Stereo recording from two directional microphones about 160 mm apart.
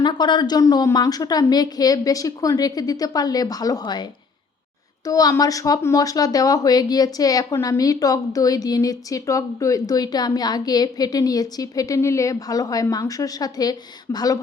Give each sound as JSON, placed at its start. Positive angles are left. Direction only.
{"t": 0.0, "sound": "speech", "side_deg": 30}